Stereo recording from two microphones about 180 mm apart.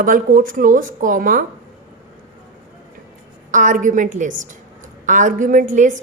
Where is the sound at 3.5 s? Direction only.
45° right (ahead or behind).